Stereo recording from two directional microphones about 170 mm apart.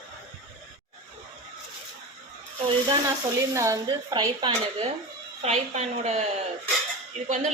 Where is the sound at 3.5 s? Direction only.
20° right (ahead or behind).